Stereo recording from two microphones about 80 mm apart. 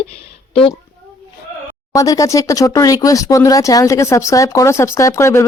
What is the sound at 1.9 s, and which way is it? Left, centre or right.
Speech, left.